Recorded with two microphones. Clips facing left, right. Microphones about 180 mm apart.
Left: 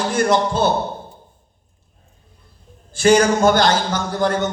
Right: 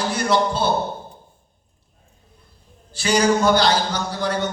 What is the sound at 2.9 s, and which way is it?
A man's voice, 50° left (ahead or behind).